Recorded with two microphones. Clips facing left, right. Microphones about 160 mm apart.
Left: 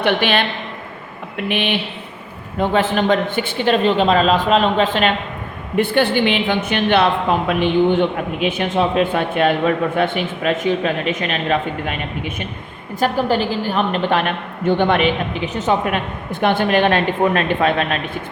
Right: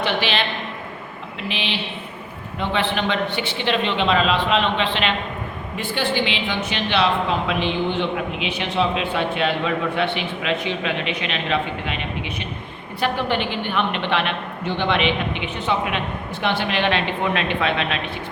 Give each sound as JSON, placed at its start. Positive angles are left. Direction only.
{"t": 0.0, "sound": "a woman's voice", "side_deg": 55}
{"t": 2.6, "sound": "a woman's voice", "side_deg": 45}
{"t": 5.7, "sound": "a woman's voice", "side_deg": 55}